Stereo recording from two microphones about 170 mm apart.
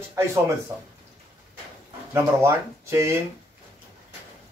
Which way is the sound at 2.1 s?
15° right (ahead or behind).